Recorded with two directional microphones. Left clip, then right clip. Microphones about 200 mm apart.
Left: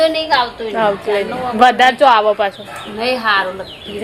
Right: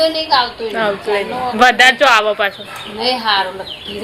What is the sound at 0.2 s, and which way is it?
A woman's voice, 10° left (ahead or behind).